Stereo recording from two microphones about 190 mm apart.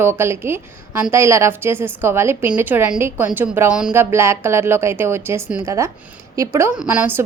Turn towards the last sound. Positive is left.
turn(degrees=-10)  # may be behind; listen again after turning